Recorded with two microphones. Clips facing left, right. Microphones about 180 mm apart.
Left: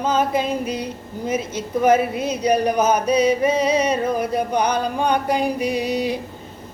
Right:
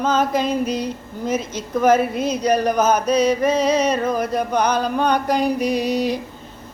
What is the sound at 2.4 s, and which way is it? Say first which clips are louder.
Chant: even; 10° left (ahead or behind).